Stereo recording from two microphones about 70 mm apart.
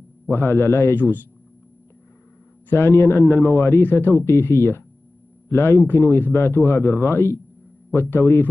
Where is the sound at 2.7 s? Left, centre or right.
Left.